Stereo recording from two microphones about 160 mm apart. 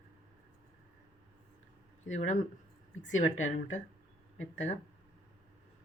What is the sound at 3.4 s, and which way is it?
Speech, 50° left (ahead or behind).